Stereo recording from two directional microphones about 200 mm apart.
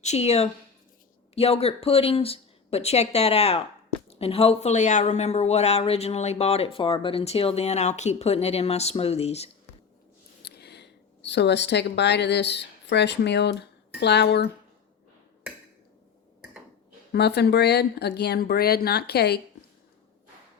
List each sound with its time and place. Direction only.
0.0 s speech: 35° left (ahead or behind)
10.4 s speech: 55° left (ahead or behind)
17.1 s speech: 55° left (ahead or behind)